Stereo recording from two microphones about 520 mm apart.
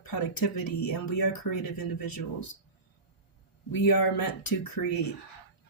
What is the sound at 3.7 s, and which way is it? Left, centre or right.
Speech, left.